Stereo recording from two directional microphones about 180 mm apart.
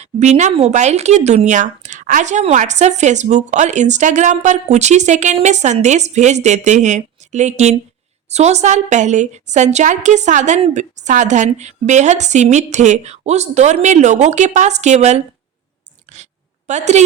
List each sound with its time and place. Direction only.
0.0 s speech: 40° right (ahead or behind)
16.6 s speech: 40° right (ahead or behind)